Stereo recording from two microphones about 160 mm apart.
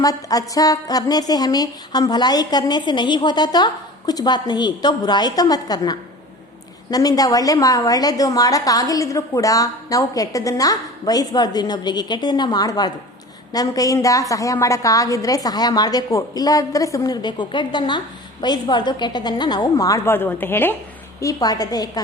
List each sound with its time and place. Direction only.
0.0 s a woman's voice: 20° left (ahead or behind)